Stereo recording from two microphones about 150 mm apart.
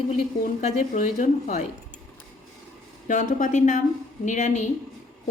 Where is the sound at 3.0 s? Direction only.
55° left (ahead or behind).